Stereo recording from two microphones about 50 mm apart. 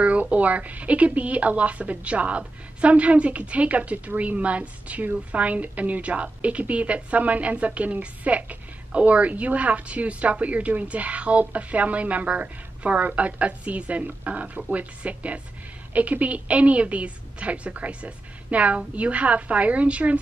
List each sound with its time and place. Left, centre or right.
0.0 s a woman's voice: right